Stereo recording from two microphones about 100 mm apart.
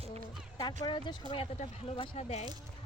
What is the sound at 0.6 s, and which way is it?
Speech, 50° left (ahead or behind).